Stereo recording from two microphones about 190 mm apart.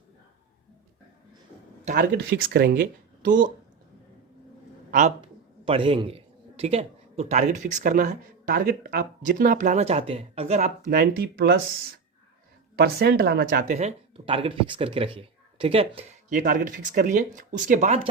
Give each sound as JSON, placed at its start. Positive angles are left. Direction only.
{"t": 1.8, "sound": "a sound", "side_deg": -40}
{"t": 2.1, "sound": "speech", "side_deg": -60}
{"t": 4.9, "sound": "speech", "side_deg": -40}
{"t": 5.2, "sound": "a man's voice", "side_deg": -30}
{"t": 12.7, "sound": "speech", "side_deg": -55}
{"t": 13.7, "sound": "speech", "side_deg": -35}
{"t": 16.3, "sound": "speech", "side_deg": -45}